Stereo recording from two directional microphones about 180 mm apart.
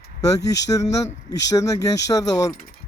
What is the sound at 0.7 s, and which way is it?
Speech, 15° left (ahead or behind).